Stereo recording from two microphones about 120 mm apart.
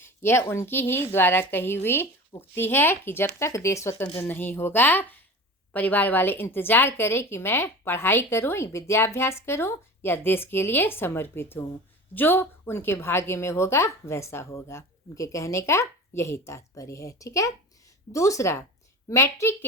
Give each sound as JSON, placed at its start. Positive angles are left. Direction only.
{"t": 0.0, "sound": "a woman's voice", "side_deg": 20}